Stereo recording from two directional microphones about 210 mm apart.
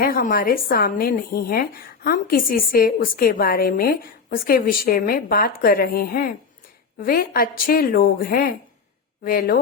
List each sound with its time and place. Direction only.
0.0 s a woman's voice: 45° left (ahead or behind)